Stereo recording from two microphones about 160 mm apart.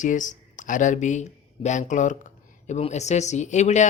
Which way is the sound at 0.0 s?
50° left (ahead or behind).